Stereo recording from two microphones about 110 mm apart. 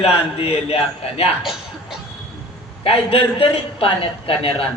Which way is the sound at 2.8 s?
60° left (ahead or behind).